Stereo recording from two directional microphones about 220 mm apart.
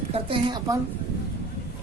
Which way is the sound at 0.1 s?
20° right (ahead or behind).